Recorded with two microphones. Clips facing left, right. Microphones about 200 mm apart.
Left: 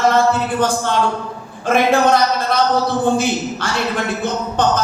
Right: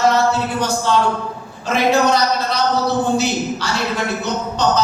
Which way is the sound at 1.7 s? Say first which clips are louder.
Left 2 dB; 55° left (ahead or behind).